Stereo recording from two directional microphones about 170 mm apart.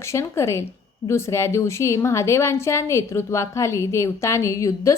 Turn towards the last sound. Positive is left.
turn(degrees=15)  # may be behind; listen again after turning